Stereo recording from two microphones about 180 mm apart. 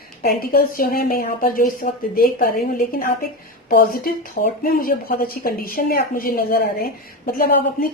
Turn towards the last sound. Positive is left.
turn(degrees=55)  # may be behind; listen again after turning